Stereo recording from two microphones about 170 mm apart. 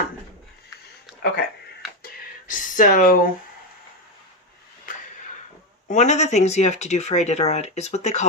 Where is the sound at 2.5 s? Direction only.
50° left (ahead or behind).